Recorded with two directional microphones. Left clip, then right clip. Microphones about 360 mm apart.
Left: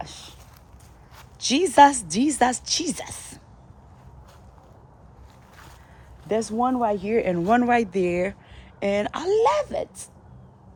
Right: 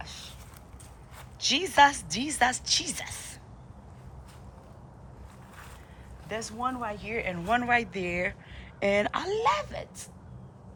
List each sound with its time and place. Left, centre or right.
0.0 s a sound: centre
1.4 s speech: centre
6.2 s speech: centre